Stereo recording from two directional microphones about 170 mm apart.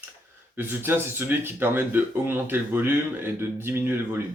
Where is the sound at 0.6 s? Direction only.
10° right (ahead or behind).